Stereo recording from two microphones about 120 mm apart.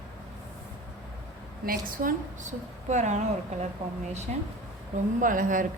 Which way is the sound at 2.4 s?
80° right.